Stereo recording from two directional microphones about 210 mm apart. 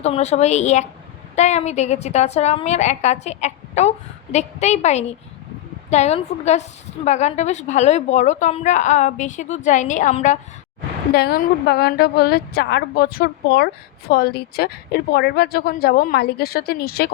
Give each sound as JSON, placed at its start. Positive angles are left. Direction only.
{"t": 0.0, "sound": "a woman's voice", "side_deg": 30}
{"t": 11.1, "sound": "speech", "side_deg": 50}